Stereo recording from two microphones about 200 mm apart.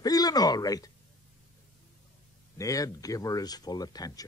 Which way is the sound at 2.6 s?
15° left (ahead or behind).